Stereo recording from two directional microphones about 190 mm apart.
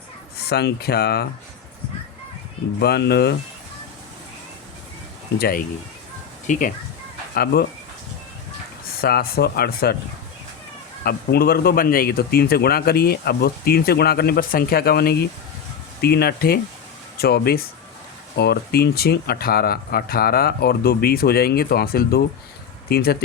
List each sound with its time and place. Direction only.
0.3 s speech: 60° left (ahead or behind)
2.8 s speech: 60° left (ahead or behind)
5.4 s speech: 50° left (ahead or behind)
9.0 s speech: 55° left (ahead or behind)
11.0 s speech: 55° left (ahead or behind)